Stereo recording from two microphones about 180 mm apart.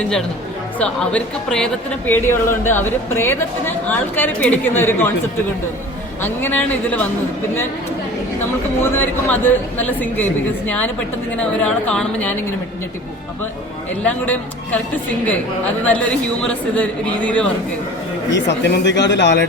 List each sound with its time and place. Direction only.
0.8 s a woman's voice: 5° left (ahead or behind)
6.2 s a woman's voice: 10° left (ahead or behind)
8.8 s a woman's voice: 10° left (ahead or behind)
14.0 s a woman's voice: 10° left (ahead or behind)
15.8 s a woman's voice: 5° left (ahead or behind)
18.3 s speech: 80° left